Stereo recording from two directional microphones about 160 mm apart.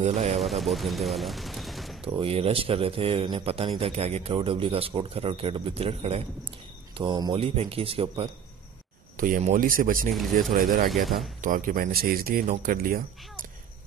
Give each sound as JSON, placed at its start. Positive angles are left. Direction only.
{"t": 0.0, "sound": "speech", "side_deg": -40}
{"t": 0.4, "sound": "speech", "side_deg": 0}
{"t": 2.0, "sound": "speech", "side_deg": -35}
{"t": 7.0, "sound": "speech", "side_deg": -25}
{"t": 9.1, "sound": "a sound", "side_deg": -55}
{"t": 9.4, "sound": "speech", "side_deg": -55}
{"t": 10.9, "sound": "speech", "side_deg": 0}
{"t": 11.4, "sound": "speech", "side_deg": -55}